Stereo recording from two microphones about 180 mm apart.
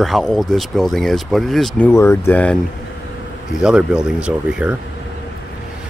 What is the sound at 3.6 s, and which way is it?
Speech, 5° right (ahead or behind).